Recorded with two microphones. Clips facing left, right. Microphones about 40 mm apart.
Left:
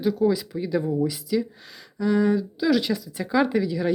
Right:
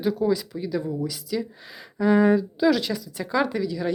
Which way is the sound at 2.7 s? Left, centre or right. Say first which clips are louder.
Left 2 dB; centre.